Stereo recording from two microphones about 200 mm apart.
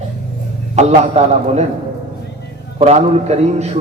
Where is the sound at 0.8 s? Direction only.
35° right (ahead or behind).